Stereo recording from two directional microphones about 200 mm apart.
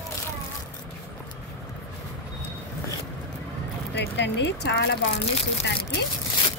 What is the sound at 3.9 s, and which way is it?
Speech, 55° left (ahead or behind).